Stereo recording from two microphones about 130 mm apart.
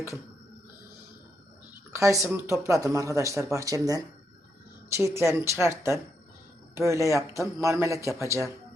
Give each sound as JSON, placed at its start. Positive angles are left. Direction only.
{"t": 1.9, "sound": "speech", "side_deg": -25}